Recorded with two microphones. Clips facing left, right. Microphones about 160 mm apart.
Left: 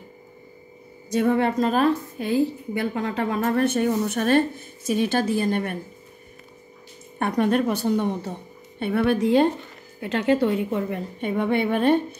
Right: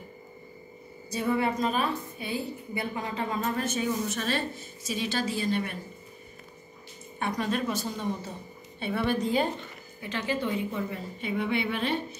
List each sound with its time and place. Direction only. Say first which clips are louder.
1.1 s a woman's voice: left 7 dB; 60° left (ahead or behind)
2.3 s a woman's voice: left 11 dB; 75° left (ahead or behind); by 5.8 s 50° left (ahead or behind)
7.2 s a woman's voice: left 8 dB; 55° left (ahead or behind)